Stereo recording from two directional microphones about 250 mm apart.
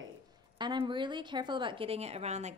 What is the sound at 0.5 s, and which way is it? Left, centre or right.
A woman's voice, centre.